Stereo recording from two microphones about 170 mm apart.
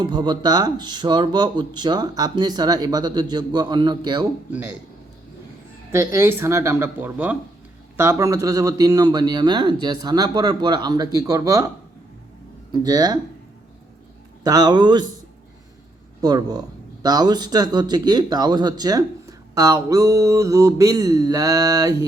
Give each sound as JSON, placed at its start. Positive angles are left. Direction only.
{"t": 0.0, "sound": "speech", "side_deg": -25}
{"t": 4.5, "sound": "speech", "side_deg": -10}
{"t": 5.9, "sound": "speech", "side_deg": -15}
{"t": 12.7, "sound": "speech", "side_deg": -20}
{"t": 14.4, "sound": "speech", "side_deg": -25}
{"t": 16.2, "sound": "speech", "side_deg": -25}